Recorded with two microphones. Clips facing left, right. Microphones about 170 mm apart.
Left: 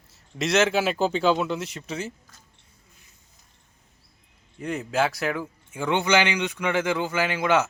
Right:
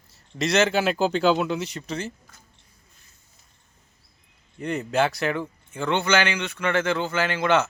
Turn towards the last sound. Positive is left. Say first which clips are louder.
# right 1 dB
turn(degrees=10)  # may be behind; listen again after turning